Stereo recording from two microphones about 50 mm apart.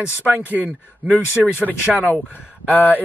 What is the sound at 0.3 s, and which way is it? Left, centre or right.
Speech, right.